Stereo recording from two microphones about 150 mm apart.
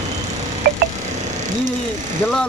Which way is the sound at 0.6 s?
90° right.